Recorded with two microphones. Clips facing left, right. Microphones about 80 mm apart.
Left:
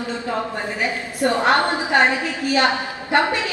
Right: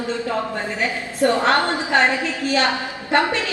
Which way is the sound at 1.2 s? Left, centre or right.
Left.